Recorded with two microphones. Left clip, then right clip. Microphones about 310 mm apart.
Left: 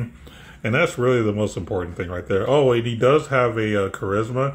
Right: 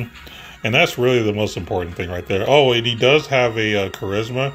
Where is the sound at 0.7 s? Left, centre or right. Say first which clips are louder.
Right 3 dB; right.